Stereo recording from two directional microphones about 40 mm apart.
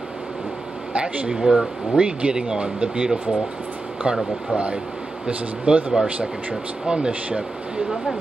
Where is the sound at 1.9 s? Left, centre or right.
Right.